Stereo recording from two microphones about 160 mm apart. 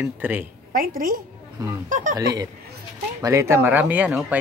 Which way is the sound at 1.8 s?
55° right (ahead or behind).